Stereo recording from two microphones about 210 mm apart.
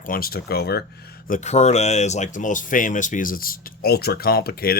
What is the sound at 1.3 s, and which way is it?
Speech, 35° left (ahead or behind).